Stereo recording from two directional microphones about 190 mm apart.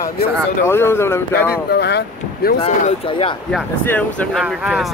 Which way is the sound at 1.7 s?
60° left (ahead or behind).